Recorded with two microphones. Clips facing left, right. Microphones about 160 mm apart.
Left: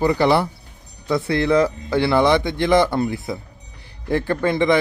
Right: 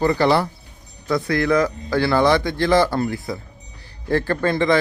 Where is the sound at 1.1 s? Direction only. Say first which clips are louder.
Left 1 dB; 25° left (ahead or behind).